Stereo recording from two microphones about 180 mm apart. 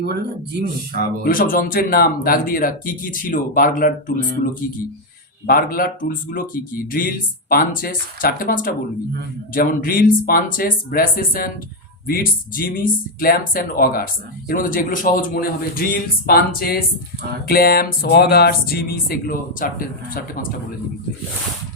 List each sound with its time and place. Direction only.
0.0 s speech: 65° right (ahead or behind)
1.2 s speech: 50° left (ahead or behind)
5.5 s speech: 55° left (ahead or behind)